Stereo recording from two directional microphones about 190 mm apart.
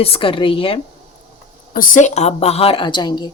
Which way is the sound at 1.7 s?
40° left (ahead or behind).